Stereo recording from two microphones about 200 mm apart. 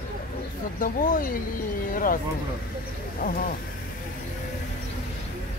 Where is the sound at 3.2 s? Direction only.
45° left (ahead or behind).